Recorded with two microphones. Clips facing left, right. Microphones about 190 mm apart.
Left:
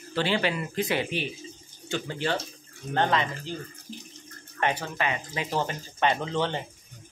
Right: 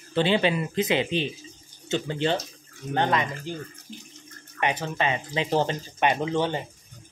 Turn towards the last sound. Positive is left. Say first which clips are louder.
# right 3 dB
turn(degrees=-15)  # may be behind; listen again after turning